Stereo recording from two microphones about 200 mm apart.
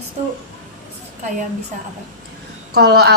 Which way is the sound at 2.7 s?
55° right (ahead or behind).